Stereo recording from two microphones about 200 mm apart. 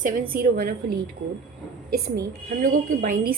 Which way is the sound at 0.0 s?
50° right (ahead or behind).